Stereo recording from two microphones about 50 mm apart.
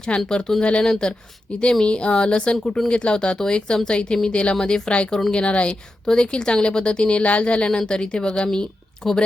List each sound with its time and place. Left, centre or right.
0.3 s a woman's voice: centre
9.0 s a woman's voice: centre